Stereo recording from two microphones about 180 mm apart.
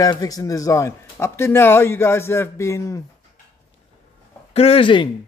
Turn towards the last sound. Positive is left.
turn(degrees=30)  # may be behind; listen again after turning